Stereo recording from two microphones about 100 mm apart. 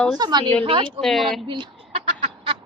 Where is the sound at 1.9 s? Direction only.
80° right.